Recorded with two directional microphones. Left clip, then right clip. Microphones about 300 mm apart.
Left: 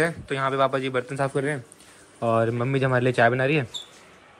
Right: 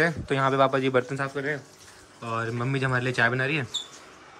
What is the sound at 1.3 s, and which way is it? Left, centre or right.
Speech, left.